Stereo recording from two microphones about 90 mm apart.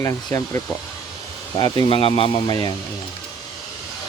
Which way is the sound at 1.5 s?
50° left (ahead or behind).